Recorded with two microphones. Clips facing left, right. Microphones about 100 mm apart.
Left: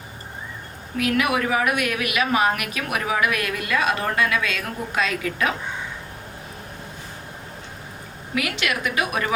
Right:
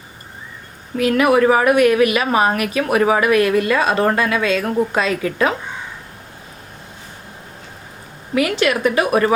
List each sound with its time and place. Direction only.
0.9 s a woman's voice: 35° right (ahead or behind)
8.4 s a woman's voice: 35° right (ahead or behind)